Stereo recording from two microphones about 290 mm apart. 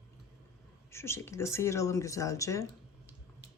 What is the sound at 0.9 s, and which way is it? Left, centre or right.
Speech, centre.